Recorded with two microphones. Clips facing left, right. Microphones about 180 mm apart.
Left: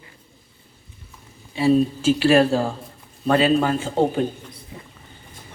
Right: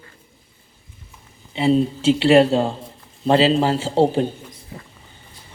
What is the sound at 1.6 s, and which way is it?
Speech, 20° right (ahead or behind).